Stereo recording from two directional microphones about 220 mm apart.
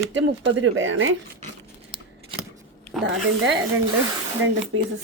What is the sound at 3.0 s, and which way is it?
Speech, 50° right (ahead or behind).